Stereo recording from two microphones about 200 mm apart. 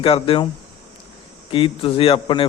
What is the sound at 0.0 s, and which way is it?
Speech, 30° left (ahead or behind).